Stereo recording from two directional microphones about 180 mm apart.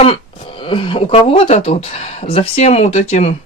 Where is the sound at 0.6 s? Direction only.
30° left (ahead or behind).